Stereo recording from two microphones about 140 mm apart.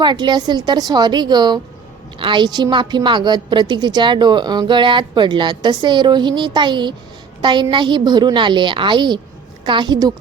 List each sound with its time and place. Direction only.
0.0 s a woman's voice: 30° right (ahead or behind)